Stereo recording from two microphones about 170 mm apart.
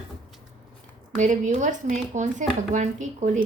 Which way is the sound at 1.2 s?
45° right (ahead or behind).